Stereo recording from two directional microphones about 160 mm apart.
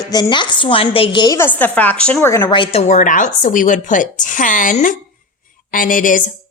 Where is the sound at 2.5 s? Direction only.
35° left (ahead or behind).